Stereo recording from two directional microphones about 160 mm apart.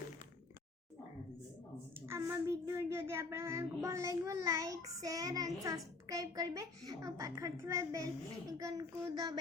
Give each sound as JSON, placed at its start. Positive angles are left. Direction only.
{"t": 2.0, "sound": "speech", "side_deg": -15}